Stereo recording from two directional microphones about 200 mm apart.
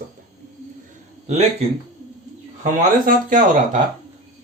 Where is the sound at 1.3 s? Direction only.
35° right (ahead or behind).